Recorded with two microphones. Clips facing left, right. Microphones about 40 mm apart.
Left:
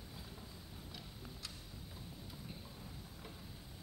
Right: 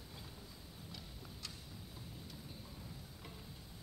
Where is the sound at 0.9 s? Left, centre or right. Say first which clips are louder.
Left 1 dB; centre.